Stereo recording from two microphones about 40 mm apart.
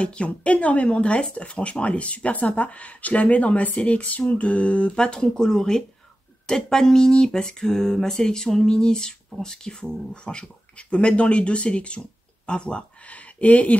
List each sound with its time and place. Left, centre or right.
0.0 s speech: left
5.1 s a sound: centre
9.4 s speech: centre; by 13.7 s left